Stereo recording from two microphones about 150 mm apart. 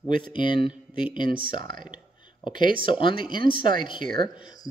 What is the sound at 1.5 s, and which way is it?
Speech, 30° left (ahead or behind).